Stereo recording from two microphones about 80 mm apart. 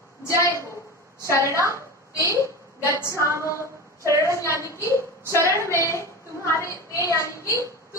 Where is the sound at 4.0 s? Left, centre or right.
Right.